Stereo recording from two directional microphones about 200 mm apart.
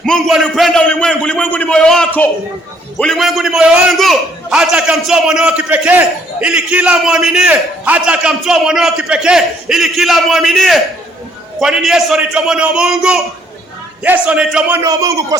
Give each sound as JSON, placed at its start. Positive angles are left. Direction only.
{"t": 0.0, "sound": "a man's voice", "side_deg": 0}